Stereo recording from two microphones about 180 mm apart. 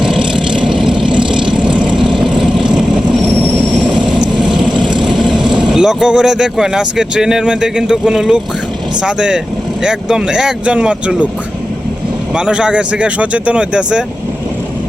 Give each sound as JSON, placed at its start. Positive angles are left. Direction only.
{"t": 0.0, "sound": "vehicle", "side_deg": -5}
{"t": 4.7, "sound": "vehicle", "side_deg": -25}
{"t": 5.5, "sound": "speech", "side_deg": -5}
{"t": 12.3, "sound": "speech", "side_deg": -5}